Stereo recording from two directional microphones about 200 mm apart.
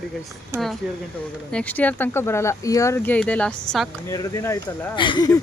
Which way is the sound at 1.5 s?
5° left (ahead or behind).